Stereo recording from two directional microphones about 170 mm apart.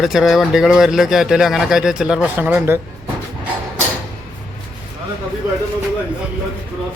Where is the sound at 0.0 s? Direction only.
Centre (ahead or behind).